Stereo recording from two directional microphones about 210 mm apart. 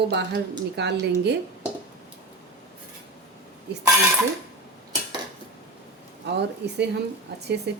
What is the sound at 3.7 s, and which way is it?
Speech, 55° right (ahead or behind).